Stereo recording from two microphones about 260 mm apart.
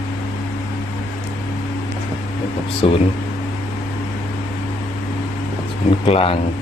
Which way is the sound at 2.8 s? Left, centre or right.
Left.